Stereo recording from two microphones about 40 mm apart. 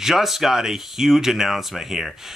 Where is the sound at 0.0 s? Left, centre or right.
Centre.